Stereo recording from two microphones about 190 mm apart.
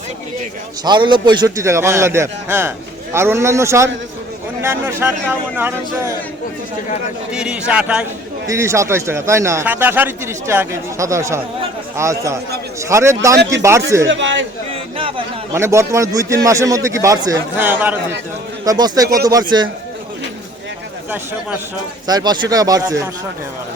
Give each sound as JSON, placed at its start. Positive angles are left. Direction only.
{"t": 0.9, "sound": "a man's voice", "side_deg": -25}
{"t": 7.3, "sound": "a man's voice", "side_deg": -5}
{"t": 14.1, "sound": "speech", "side_deg": -75}
{"t": 14.7, "sound": "a sound", "side_deg": -30}
{"t": 15.5, "sound": "a man's voice", "side_deg": -15}
{"t": 22.0, "sound": "speech", "side_deg": -20}